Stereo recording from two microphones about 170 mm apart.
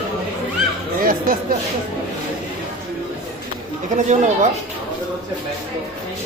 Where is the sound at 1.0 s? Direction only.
55° right (ahead or behind).